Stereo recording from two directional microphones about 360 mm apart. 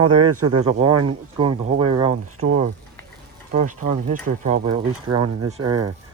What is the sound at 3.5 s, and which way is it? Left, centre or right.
Speech, right.